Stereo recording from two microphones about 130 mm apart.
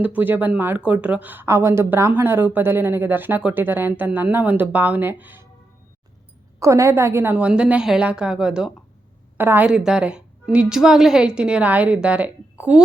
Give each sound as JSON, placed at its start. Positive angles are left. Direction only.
{"t": 0.0, "sound": "speech", "side_deg": -10}
{"t": 6.6, "sound": "speech", "side_deg": -25}